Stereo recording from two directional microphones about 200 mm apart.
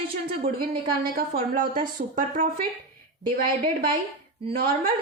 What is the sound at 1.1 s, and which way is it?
Speech, 45° right (ahead or behind).